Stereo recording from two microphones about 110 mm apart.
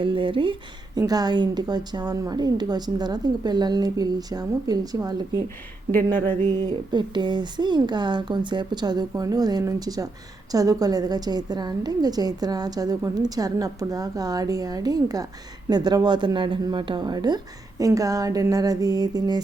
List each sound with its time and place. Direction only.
0.0 s speech: 50° right (ahead or behind)
0.9 s a woman's voice: 35° right (ahead or behind)
5.9 s speech: 20° left (ahead or behind)
6.5 s a woman's voice: 40° right (ahead or behind)